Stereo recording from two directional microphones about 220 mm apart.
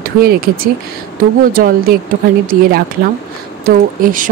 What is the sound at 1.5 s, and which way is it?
Speech, 40° right (ahead or behind).